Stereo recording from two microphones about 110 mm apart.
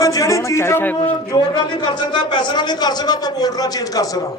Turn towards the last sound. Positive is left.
turn(degrees=35)  # may be behind; listen again after turning